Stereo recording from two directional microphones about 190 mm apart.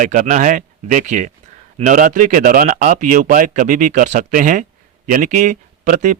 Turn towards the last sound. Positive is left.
turn(degrees=-40)  # may be behind; listen again after turning